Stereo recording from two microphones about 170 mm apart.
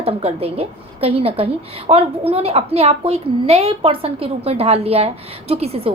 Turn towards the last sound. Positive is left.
turn(degrees=-35)  # may be behind; listen again after turning